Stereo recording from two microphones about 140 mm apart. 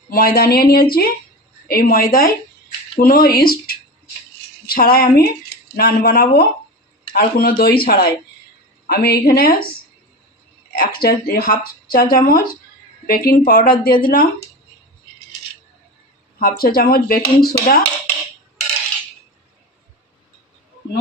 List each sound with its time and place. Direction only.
0.1 s speech: 90° left
10.7 s speech: 90° left
16.4 s speech: 90° left